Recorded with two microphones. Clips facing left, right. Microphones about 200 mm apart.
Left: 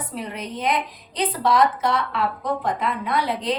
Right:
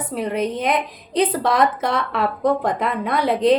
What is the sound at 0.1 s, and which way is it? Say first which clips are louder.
A woman's voice: right 12 dB; 55° right (ahead or behind).